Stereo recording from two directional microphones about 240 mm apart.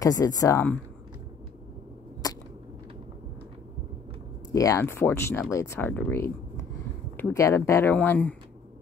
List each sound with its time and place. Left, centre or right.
0.0 s speech: centre
2.2 s a sound: centre
4.6 s speech: centre